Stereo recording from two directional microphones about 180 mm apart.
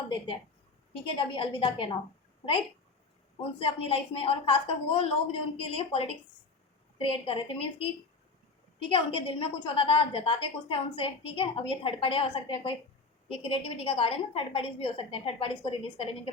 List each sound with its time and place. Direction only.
1.1 s a woman's voice: 30° left (ahead or behind)
3.6 s a woman's voice: 30° left (ahead or behind)
8.9 s a woman's voice: 30° left (ahead or behind)